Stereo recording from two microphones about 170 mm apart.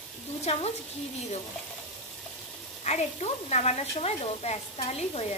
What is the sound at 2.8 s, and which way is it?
Speech, 40° left (ahead or behind).